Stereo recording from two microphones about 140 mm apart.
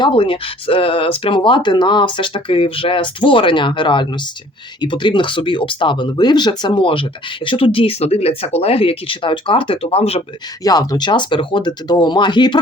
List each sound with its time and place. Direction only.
0.0 s speech: 40° left (ahead or behind)
10.6 s speech: 25° left (ahead or behind)